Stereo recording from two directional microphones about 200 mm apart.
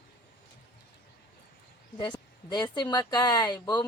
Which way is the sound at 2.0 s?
20° left (ahead or behind).